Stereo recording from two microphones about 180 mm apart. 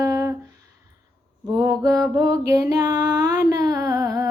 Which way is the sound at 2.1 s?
20° right (ahead or behind).